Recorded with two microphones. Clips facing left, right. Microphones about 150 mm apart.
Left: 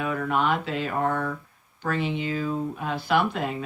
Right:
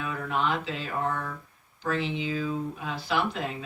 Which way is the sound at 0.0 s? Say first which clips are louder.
Left 4 dB; 55° left (ahead or behind).